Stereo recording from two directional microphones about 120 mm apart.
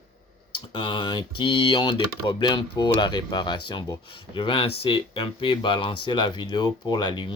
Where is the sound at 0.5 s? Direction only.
45° left (ahead or behind).